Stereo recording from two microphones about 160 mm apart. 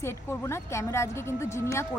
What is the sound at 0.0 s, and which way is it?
Speech, 15° left (ahead or behind).